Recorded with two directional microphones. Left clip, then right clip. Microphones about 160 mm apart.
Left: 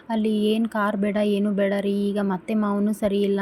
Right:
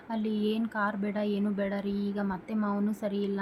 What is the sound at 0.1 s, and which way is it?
Speech, 35° left (ahead or behind).